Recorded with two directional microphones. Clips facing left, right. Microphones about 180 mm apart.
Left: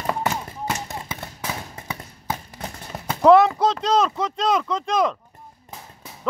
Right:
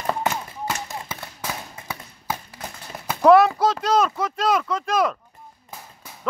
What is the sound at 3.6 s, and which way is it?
Speech, 5° right (ahead or behind).